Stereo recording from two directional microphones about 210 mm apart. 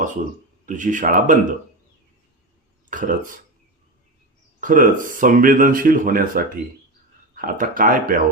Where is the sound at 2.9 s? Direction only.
40° right (ahead or behind).